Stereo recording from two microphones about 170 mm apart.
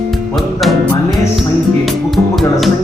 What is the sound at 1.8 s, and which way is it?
Speech, centre (ahead or behind).